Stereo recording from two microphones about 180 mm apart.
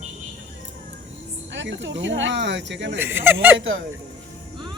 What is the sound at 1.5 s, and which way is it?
Speech, 90° right.